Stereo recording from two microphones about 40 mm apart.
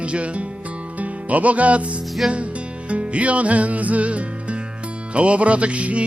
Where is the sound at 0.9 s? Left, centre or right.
Right.